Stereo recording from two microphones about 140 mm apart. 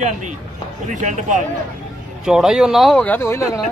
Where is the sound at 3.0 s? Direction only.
15° left (ahead or behind).